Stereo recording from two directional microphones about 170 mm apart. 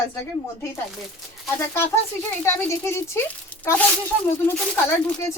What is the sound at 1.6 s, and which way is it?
Speech, 15° left (ahead or behind).